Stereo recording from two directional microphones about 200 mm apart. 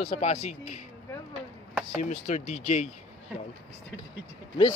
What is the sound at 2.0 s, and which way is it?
Speech, 35° left (ahead or behind).